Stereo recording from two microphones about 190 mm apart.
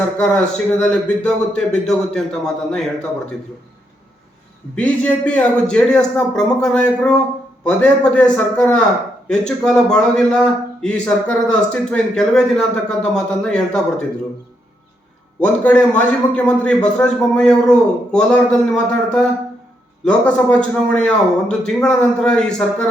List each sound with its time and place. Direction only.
0.2 s a man's voice: 5° left (ahead or behind)
4.7 s a man's voice: 5° left (ahead or behind)
15.4 s a man's voice: 5° left (ahead or behind)